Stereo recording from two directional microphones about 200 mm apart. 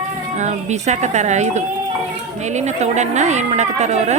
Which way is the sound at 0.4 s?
35° right (ahead or behind).